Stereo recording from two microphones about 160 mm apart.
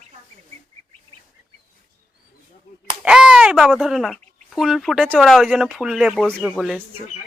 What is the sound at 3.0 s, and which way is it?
Speech, 5° right (ahead or behind).